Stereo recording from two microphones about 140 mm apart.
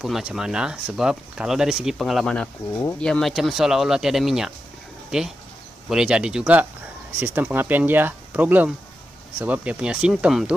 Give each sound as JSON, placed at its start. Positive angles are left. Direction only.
{"t": 0.0, "sound": "speech", "side_deg": 0}